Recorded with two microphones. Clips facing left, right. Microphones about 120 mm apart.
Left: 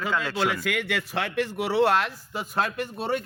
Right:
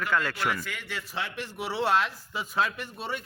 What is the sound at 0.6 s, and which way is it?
Speech, 75° left (ahead or behind).